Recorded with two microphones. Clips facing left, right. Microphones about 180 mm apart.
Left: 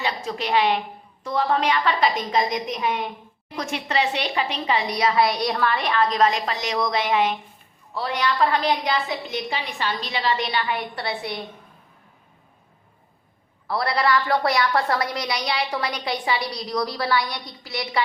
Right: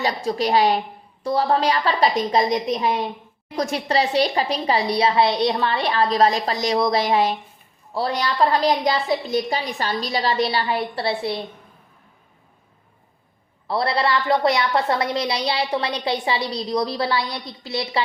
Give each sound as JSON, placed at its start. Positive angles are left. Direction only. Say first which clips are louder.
{"t": 0.0, "sound": "a woman's voice", "louder": "right 5 dB", "side_deg": -35}
{"t": 13.7, "sound": "a woman's voice", "louder": "right 1 dB", "side_deg": -25}